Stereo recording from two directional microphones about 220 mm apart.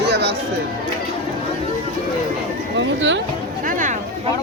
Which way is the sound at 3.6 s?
35° right (ahead or behind).